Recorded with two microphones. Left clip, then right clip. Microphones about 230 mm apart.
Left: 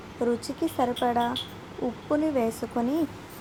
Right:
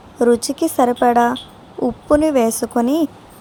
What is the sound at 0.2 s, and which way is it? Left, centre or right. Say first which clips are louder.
A woman's voice: right 12 dB; right.